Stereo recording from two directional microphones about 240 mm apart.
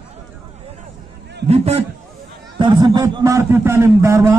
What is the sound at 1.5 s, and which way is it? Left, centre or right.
A man's voice, right.